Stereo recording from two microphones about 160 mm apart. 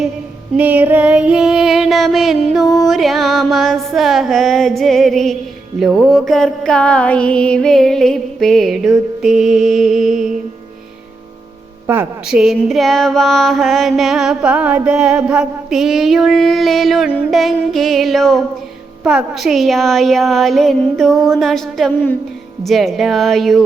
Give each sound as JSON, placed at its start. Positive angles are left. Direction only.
{"t": 0.5, "sound": "female singing", "side_deg": -10}
{"t": 2.7, "sound": "mantra", "side_deg": 0}
{"t": 11.9, "sound": "mantra", "side_deg": -10}